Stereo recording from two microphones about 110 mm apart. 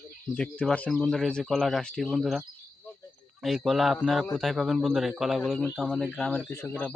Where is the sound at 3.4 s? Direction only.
Centre (ahead or behind).